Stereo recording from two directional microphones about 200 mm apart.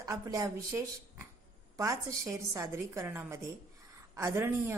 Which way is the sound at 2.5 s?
15° right (ahead or behind).